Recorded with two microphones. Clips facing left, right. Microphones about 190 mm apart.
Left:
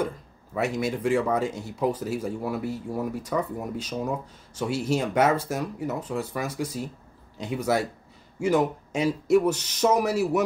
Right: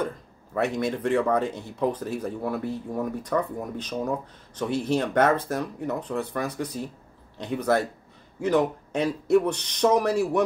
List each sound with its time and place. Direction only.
0.6 s speech: 5° left (ahead or behind)